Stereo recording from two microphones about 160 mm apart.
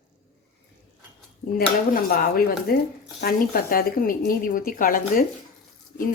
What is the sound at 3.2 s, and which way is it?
Speech, 70° left (ahead or behind).